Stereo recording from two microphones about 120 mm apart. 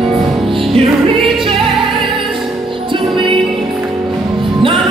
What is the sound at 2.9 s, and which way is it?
Music, 45° right (ahead or behind).